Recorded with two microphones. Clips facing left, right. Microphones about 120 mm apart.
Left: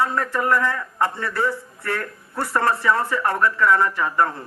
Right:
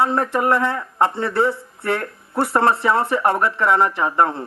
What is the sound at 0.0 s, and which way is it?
Speech, 25° right (ahead or behind).